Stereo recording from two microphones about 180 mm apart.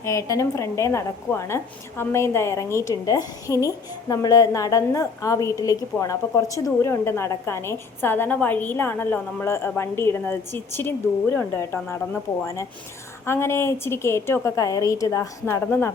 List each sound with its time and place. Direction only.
0.0 s a woman's voice: 15° left (ahead or behind)
13.2 s a woman's voice: 15° left (ahead or behind)